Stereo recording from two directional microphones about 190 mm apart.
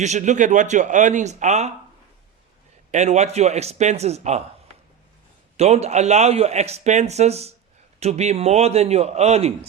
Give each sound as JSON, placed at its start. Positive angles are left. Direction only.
{"t": 0.0, "sound": "a man's voice", "side_deg": -40}
{"t": 2.9, "sound": "a man's voice", "side_deg": -35}
{"t": 5.5, "sound": "a man's voice", "side_deg": -35}